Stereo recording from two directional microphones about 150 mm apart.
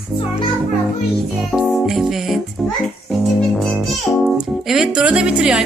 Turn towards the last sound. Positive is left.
turn(degrees=-5)  # may be behind; listen again after turning